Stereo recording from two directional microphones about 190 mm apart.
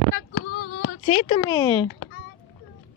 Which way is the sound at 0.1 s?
55° left (ahead or behind).